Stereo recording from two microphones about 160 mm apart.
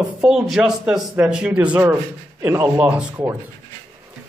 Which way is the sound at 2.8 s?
10° right (ahead or behind).